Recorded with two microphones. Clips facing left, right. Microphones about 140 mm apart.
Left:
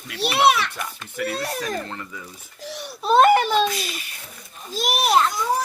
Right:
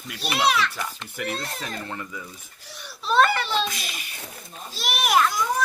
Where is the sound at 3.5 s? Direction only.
Centre (ahead or behind).